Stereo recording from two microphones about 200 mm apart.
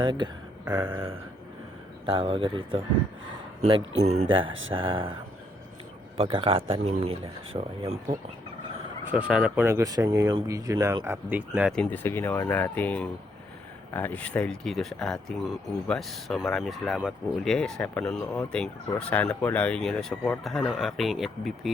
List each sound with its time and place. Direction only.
0.0 s speech: 20° right (ahead or behind)
0.6 s a sound: 10° right (ahead or behind)
0.9 s speech: 25° right (ahead or behind)
6.1 s speech: 25° right (ahead or behind)
9.1 s speech: 5° right (ahead or behind)
11.7 s speech: 5° left (ahead or behind)